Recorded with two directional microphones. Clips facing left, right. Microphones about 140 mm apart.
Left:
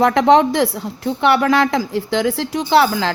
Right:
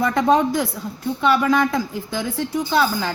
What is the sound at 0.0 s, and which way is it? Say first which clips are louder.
A woman's voice: left 5 dB; 80° left.